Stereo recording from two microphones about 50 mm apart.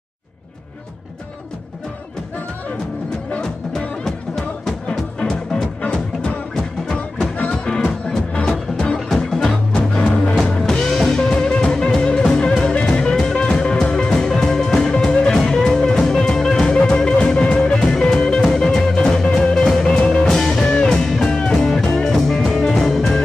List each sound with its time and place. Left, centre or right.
3.3 s music: centre
5.8 s music: left
7.7 s music: centre
13.1 s music: centre